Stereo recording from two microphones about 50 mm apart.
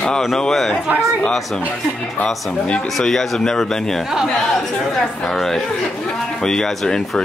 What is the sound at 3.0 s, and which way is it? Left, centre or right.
A man's voice, centre.